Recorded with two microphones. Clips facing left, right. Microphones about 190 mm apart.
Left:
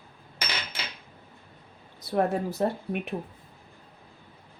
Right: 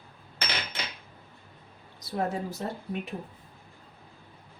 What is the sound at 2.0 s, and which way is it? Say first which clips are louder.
Speech: left 5 dB; 60° left (ahead or behind).